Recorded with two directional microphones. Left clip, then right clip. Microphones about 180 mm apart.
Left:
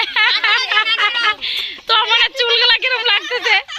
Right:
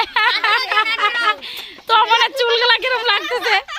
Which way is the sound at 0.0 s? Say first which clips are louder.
Left 1 dB; 5° right (ahead or behind).